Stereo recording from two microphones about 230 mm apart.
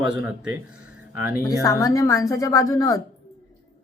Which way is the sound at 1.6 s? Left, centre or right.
Centre.